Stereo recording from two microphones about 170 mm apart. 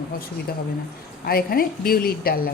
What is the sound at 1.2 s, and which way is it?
A woman's voice, 60° left (ahead or behind).